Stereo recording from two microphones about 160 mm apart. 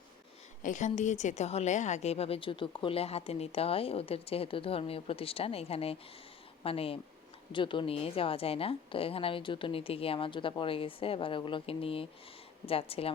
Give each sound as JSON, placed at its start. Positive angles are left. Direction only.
{"t": 0.6, "sound": "a woman's voice", "side_deg": 50}